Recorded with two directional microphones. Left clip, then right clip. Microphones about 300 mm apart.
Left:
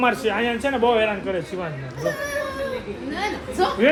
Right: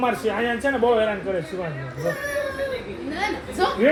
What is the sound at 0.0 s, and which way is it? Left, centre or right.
A man's voice, centre.